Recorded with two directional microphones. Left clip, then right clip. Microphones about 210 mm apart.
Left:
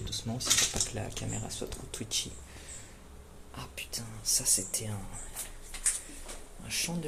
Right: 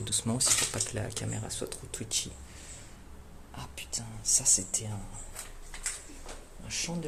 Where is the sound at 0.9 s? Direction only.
15° right (ahead or behind).